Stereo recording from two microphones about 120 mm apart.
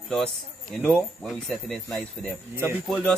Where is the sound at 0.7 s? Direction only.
5° left (ahead or behind).